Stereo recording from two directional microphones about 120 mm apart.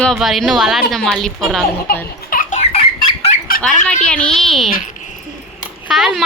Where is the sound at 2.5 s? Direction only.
70° left (ahead or behind).